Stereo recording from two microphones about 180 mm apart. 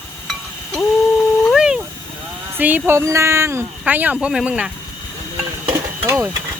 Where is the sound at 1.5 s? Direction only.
5° right (ahead or behind).